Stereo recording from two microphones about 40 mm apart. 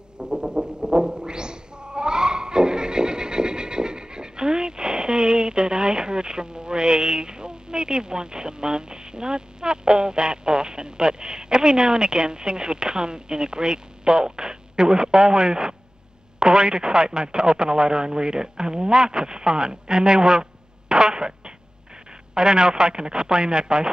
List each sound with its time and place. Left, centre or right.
0.2 s music: right
16.3 s speech: right
20.9 s fart: centre
22.3 s speech: right